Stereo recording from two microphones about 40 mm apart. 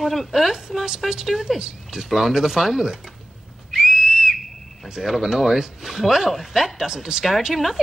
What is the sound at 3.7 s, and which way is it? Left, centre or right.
Whistle, centre.